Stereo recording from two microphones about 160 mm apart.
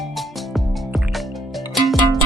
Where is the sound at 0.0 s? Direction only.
Centre (ahead or behind).